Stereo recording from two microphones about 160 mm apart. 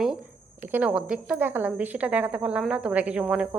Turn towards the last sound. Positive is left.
turn(degrees=-5)  # may be behind; listen again after turning